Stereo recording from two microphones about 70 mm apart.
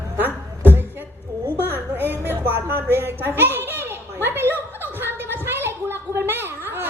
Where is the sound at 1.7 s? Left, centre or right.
Right.